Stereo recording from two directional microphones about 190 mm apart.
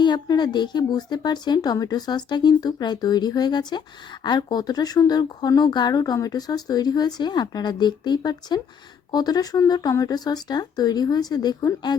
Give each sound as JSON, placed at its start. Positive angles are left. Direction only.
{"t": 0.0, "sound": "speech", "side_deg": 25}